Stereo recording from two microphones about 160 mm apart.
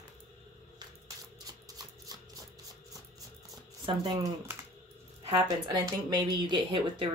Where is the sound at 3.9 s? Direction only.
35° right (ahead or behind).